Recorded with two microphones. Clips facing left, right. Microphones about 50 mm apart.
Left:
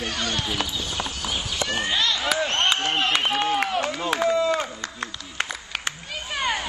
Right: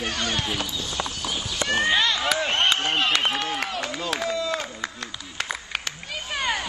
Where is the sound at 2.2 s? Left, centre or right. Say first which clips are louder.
Even; centre.